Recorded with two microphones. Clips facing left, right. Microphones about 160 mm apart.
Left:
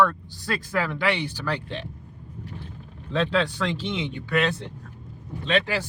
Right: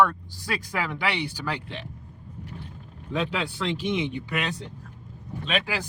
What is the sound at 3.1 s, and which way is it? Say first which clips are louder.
A man's voice: left 4 dB; 10° right (ahead or behind).